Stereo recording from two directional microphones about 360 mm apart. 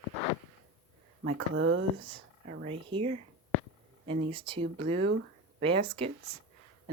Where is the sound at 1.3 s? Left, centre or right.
Right.